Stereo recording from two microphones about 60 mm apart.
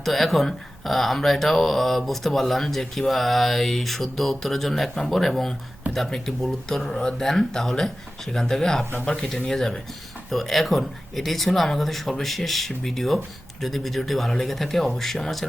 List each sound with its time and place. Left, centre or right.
0.0 s speech: centre